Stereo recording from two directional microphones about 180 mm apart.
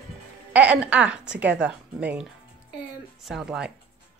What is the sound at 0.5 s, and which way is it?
A woman's voice, 10° right (ahead or behind).